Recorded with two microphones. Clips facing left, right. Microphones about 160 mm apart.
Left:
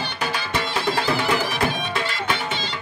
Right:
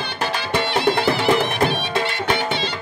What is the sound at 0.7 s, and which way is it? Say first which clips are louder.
Music: right 4 dB; 65° right (ahead or behind).